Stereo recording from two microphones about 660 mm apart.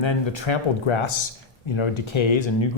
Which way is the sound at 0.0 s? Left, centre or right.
Left.